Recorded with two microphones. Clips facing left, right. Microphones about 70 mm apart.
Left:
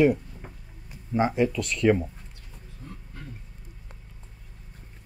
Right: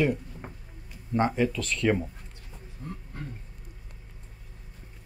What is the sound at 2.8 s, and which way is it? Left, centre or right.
Roaring cats, right.